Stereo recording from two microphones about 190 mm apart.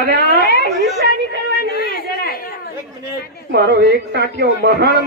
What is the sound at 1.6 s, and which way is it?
Chatter, 55° left (ahead or behind).